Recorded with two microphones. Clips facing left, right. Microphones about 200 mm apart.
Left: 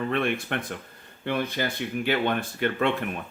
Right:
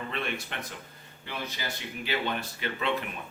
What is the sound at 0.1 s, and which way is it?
Speech, 55° left (ahead or behind).